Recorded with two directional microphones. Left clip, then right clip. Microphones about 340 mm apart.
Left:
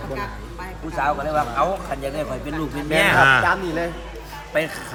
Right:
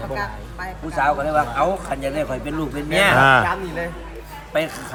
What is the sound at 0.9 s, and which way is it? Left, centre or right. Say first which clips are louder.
Speech: right 3 dB; right.